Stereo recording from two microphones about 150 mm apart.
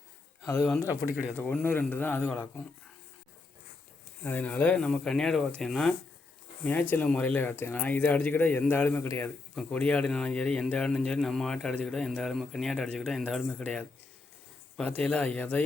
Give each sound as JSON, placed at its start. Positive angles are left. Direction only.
{"t": 0.4, "sound": "speech", "side_deg": 15}
{"t": 4.2, "sound": "speech", "side_deg": 10}
{"t": 6.9, "sound": "a man's voice", "side_deg": 10}